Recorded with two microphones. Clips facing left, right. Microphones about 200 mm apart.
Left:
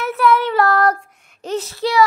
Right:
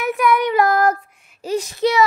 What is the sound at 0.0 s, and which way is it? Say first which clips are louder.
Child singing: left 1 dB; 15° right (ahead or behind).